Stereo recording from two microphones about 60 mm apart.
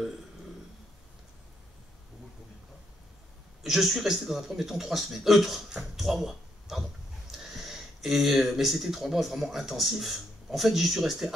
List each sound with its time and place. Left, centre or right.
3.6 s a man's voice: centre